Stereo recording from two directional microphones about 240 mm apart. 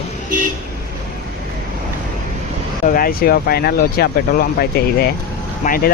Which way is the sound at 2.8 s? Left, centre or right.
Left.